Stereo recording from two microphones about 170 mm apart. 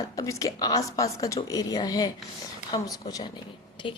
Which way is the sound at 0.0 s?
20° left (ahead or behind).